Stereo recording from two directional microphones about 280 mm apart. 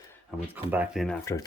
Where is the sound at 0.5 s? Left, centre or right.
Centre.